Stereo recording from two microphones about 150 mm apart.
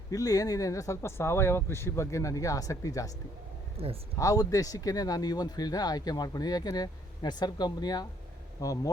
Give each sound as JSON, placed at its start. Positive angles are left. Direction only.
{"t": 0.1, "sound": "speech", "side_deg": 25}
{"t": 3.8, "sound": "speech", "side_deg": -40}
{"t": 4.2, "sound": "speech", "side_deg": 25}